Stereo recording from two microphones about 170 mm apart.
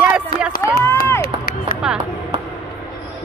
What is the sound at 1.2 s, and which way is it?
Run, 65° left (ahead or behind).